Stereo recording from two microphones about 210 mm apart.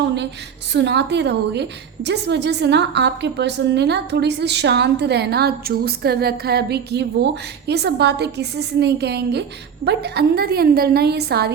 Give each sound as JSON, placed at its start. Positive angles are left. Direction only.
{"t": 0.7, "sound": "a woman's voice", "side_deg": -55}